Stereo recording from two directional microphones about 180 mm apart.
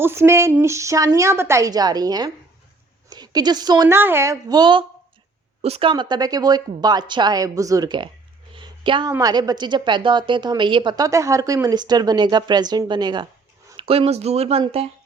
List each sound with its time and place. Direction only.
0.0 s a woman's voice: 15° right (ahead or behind)
8.5 s a sound: 25° right (ahead or behind)
9.1 s a woman's voice: 20° right (ahead or behind)